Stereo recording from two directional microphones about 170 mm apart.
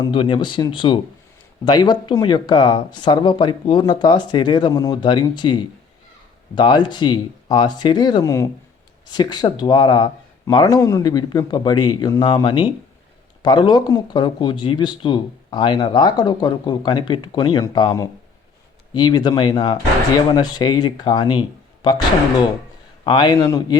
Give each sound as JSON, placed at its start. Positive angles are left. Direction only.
{"t": 0.0, "sound": "speech", "side_deg": 30}
{"t": 23.0, "sound": "speech", "side_deg": 25}